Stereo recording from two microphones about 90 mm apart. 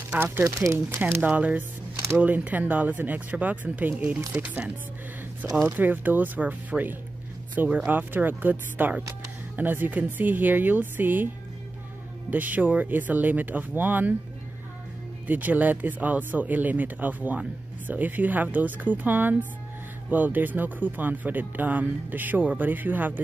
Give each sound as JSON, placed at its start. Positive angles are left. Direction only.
{"t": 0.1, "sound": "speech", "side_deg": -25}
{"t": 0.7, "sound": "speech", "side_deg": -25}
{"t": 2.0, "sound": "a sound", "side_deg": -30}
{"t": 2.2, "sound": "speech", "side_deg": -20}
{"t": 12.3, "sound": "speech", "side_deg": -20}
{"t": 15.2, "sound": "speech", "side_deg": -20}